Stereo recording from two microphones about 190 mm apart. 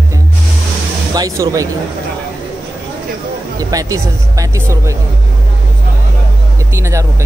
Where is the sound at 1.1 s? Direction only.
20° right (ahead or behind).